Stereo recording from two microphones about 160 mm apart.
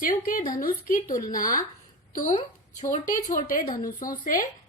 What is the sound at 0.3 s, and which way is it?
A woman's voice, 60° left (ahead or behind).